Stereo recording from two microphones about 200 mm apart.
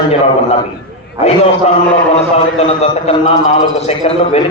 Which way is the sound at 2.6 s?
30° left (ahead or behind).